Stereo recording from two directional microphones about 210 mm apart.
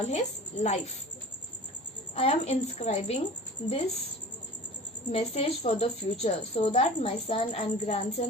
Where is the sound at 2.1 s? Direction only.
30° left (ahead or behind).